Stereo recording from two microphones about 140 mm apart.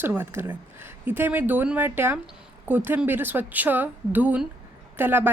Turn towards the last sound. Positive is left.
turn(degrees=-15)  # may be behind; listen again after turning